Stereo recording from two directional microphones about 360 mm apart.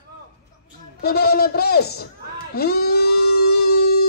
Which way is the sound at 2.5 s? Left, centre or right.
Left.